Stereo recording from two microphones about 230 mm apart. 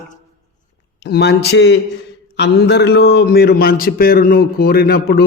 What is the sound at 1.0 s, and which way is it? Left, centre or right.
A man's voice, left.